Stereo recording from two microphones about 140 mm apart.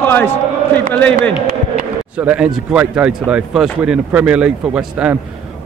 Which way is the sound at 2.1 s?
10° right (ahead or behind).